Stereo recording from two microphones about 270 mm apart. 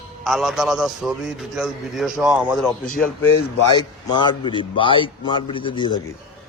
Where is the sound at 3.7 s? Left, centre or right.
Centre.